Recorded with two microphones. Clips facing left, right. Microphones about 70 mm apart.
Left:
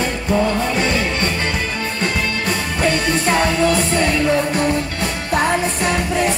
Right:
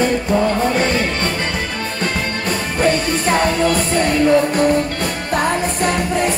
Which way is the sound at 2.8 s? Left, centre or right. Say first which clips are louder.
Right 2 dB; right.